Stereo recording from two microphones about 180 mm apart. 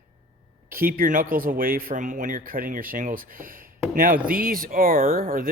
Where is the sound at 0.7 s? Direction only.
55° right (ahead or behind).